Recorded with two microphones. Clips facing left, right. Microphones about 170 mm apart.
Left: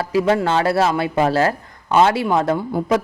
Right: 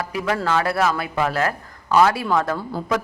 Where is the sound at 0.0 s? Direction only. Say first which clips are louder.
Left 6 dB; 30° left (ahead or behind).